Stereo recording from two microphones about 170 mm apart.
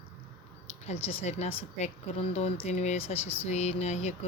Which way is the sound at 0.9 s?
40° left (ahead or behind).